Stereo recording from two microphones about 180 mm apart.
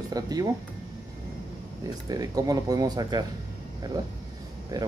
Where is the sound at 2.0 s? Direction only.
20° right (ahead or behind).